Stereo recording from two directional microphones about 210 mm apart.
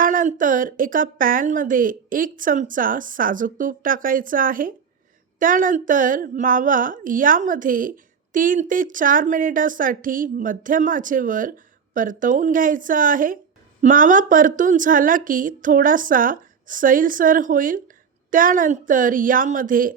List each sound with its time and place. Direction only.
0.0 s a woman's voice: 40° right (ahead or behind)